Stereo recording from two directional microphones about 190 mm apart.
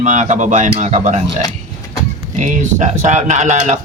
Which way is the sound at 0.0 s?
40° right (ahead or behind).